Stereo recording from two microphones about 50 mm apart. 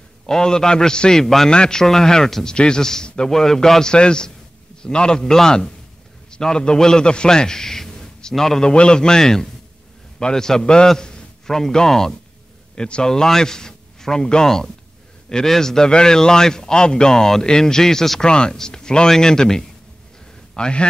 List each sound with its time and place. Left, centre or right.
0.3 s a man's voice: centre
18.2 s a man's voice: centre